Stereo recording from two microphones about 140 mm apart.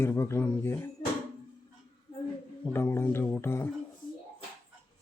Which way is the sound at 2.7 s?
15° left (ahead or behind).